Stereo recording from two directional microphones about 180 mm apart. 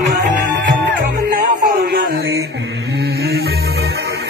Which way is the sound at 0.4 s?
75° right (ahead or behind).